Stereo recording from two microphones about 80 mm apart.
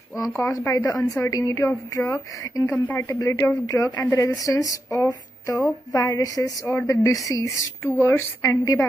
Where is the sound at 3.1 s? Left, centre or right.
Left.